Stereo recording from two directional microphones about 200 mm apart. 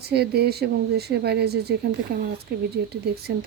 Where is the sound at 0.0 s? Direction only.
55° right (ahead or behind).